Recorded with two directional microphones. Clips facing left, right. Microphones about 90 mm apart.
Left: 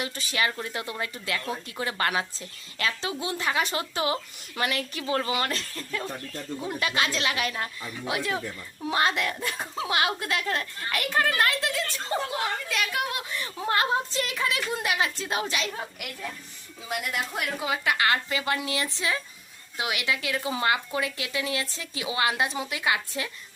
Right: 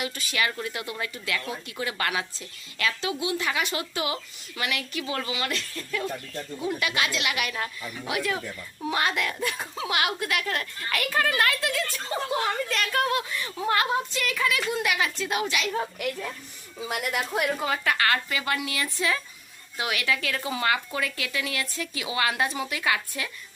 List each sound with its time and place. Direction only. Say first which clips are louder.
0.0 s a woman's voice: even; 30° left (ahead or behind)
12.6 s a woman's voice: right 3 dB; 5° left (ahead or behind)
13.3 s a woman's voice: right 1 dB; 30° left (ahead or behind)
17.3 s a woman's voice: right 4 dB; centre (ahead or behind)
17.7 s speech: left 4 dB; 15° left (ahead or behind)